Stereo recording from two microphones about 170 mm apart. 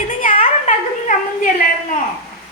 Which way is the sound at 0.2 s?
50° left (ahead or behind).